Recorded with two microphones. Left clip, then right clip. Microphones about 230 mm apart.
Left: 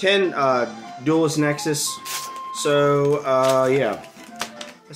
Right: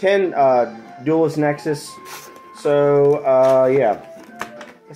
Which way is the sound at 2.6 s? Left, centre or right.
Centre.